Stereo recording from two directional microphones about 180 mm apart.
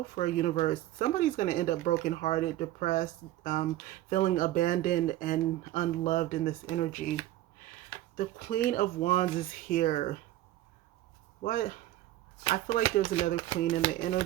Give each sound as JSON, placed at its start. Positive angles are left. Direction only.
{"t": 0.2, "sound": "speech", "side_deg": 50}
{"t": 8.1, "sound": "speech", "side_deg": 50}
{"t": 11.4, "sound": "speech", "side_deg": 50}
{"t": 12.4, "sound": "speech", "side_deg": 30}
{"t": 13.9, "sound": "speech", "side_deg": 50}